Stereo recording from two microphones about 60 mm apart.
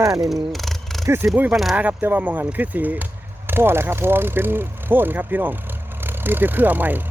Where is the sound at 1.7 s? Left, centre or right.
Right.